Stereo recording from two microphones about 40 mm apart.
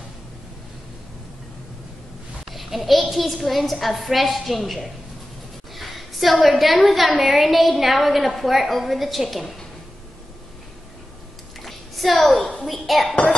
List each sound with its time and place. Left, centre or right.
2.5 s a woman's voice: centre
11.6 s a sound: centre
12.2 s a woman's voice: centre
12.6 s a woman's voice: centre